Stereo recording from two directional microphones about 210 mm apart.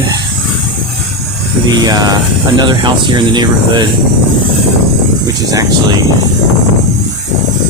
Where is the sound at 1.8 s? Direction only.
20° right (ahead or behind).